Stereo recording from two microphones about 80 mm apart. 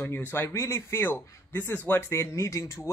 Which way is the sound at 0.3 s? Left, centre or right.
Left.